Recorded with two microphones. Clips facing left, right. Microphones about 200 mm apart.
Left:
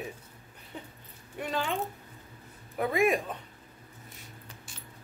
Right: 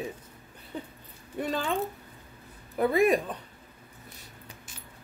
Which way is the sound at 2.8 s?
35° right (ahead or behind).